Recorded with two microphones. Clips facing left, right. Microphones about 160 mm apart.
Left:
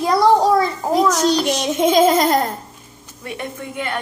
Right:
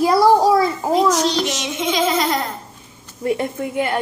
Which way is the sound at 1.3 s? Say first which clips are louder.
Left 4 dB; 40° left (ahead or behind).